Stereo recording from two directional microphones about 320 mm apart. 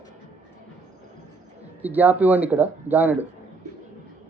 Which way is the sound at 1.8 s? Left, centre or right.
Centre.